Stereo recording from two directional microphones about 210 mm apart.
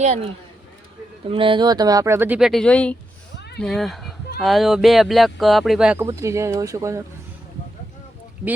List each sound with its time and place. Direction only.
0.0 s speech: 30° right (ahead or behind)
1.3 s speech: 25° right (ahead or behind); by 3.0 s 5° left (ahead or behind)
3.3 s a sound: 55° left (ahead or behind)
3.6 s speech: centre (ahead or behind); by 7.0 s 15° right (ahead or behind)